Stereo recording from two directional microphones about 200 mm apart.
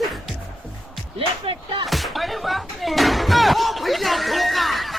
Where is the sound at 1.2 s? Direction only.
25° right (ahead or behind).